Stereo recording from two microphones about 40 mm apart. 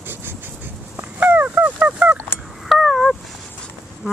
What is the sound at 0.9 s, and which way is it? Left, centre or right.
Fowl, right.